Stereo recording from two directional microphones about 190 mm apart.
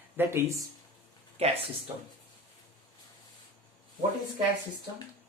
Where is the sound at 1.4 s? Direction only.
30° right (ahead or behind).